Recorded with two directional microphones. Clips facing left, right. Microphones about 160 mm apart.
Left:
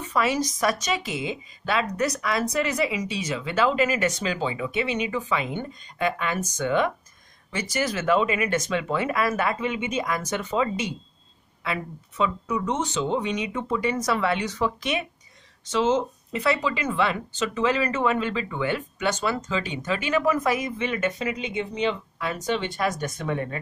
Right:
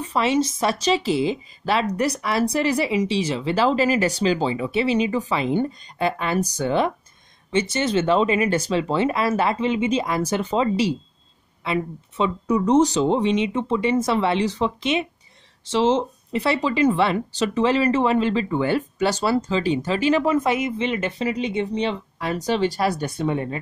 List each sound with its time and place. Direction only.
0.0 s speech: 30° right (ahead or behind)
12.4 s speech: 35° right (ahead or behind)